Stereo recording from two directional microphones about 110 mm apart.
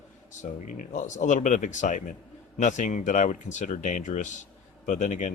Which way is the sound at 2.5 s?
90° left.